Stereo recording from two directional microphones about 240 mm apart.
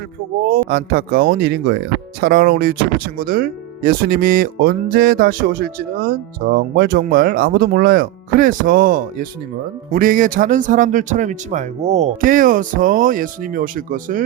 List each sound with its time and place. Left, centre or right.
0.4 s speech: right